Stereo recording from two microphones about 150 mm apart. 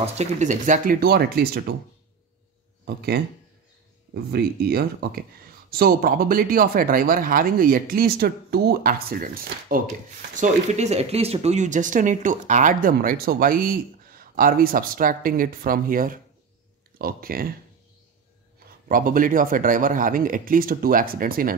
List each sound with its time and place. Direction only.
0.0 s speech: 50° right (ahead or behind); by 1.6 s 90° right
2.8 s speech: 90° right; by 9.8 s 70° right (ahead or behind)
10.3 s speech: 50° right (ahead or behind); by 17.5 s 75° right (ahead or behind)
18.9 s speech: 70° right (ahead or behind)